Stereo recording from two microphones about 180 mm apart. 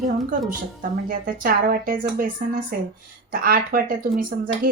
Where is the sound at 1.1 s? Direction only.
55° right (ahead or behind).